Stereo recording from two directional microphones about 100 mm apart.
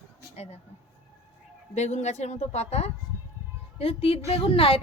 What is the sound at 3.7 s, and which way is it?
A woman's voice, 75° left (ahead or behind).